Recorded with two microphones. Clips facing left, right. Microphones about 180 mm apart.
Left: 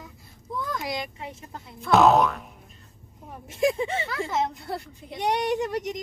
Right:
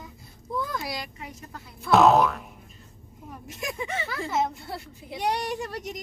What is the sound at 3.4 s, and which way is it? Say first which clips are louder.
Speech: left 10 dB; 30° left (ahead or behind).